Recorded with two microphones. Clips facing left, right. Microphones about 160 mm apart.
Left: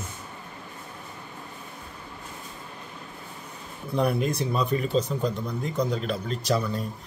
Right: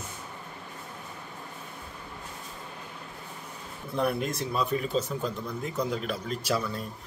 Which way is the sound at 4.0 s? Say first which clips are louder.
Left 3 dB; centre (ahead or behind).